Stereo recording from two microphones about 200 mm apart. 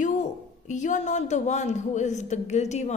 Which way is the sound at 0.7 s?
35° left (ahead or behind).